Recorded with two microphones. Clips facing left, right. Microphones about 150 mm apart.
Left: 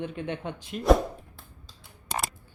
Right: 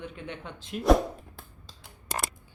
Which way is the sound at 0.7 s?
Centre (ahead or behind).